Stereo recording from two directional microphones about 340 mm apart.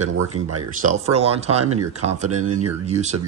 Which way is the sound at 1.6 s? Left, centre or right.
Right.